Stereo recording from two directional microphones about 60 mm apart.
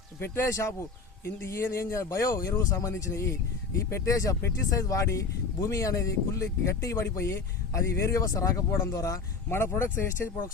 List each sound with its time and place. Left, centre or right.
0.2 s speech: left
8.7 s speech: left